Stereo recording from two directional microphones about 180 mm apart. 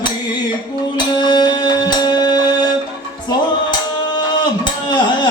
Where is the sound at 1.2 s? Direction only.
25° left (ahead or behind).